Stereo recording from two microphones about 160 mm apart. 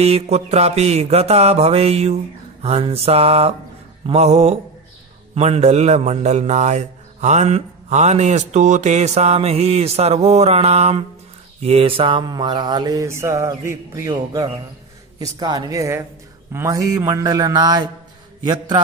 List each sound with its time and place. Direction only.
0.0 s mantra: 40° right (ahead or behind)
5.3 s a man's voice: 40° right (ahead or behind)
11.6 s mantra: 35° right (ahead or behind)